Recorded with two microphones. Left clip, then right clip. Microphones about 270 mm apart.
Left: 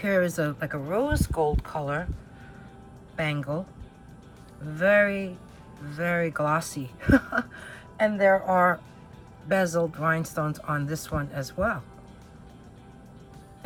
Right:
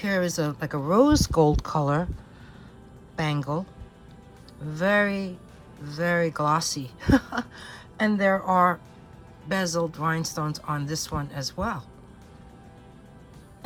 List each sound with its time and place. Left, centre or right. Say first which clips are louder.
0.0 s speech: left 1 dB; centre
3.2 s speech: right 1 dB; centre
4.7 s speech: left 2 dB; centre